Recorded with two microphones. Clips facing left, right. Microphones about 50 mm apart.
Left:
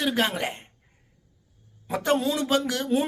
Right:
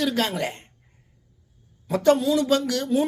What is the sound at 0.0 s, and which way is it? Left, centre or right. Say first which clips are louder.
Speech: right 1 dB; left.